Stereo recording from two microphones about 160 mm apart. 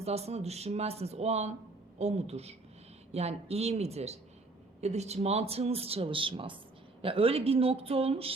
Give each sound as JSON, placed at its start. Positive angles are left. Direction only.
{"t": 0.0, "sound": "speech", "side_deg": -40}